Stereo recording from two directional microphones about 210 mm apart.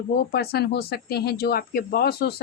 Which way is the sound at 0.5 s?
50° left (ahead or behind).